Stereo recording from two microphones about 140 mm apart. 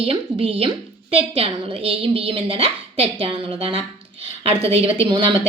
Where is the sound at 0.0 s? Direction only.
45° right (ahead or behind).